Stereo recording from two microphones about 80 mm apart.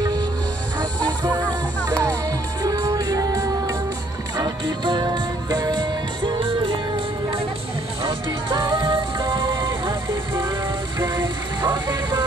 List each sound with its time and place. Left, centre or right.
1.9 s music: right
4.4 s music: right
8.0 s music: right